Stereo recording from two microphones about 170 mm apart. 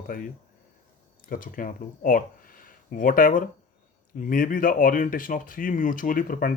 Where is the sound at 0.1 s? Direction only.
50° left (ahead or behind).